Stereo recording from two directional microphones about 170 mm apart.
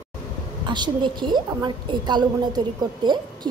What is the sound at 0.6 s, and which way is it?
A woman's voice, 25° right (ahead or behind).